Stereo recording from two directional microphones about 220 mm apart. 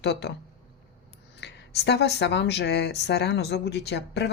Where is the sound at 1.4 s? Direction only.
50° left (ahead or behind).